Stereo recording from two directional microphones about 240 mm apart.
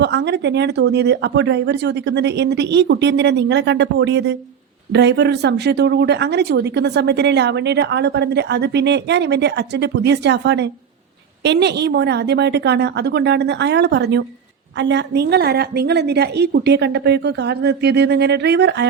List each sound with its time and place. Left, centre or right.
0.0 s speech: right